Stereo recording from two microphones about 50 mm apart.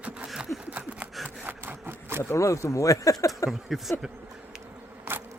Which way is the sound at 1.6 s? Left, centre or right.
Right.